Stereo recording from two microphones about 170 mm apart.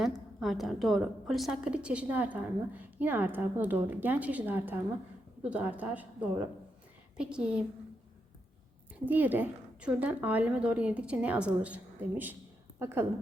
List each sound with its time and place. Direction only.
0.3 s a woman's voice: centre (ahead or behind)
9.0 s a woman's voice: 10° right (ahead or behind)